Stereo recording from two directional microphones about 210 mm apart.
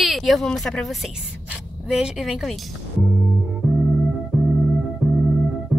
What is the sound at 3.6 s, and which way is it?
Music, 5° right (ahead or behind).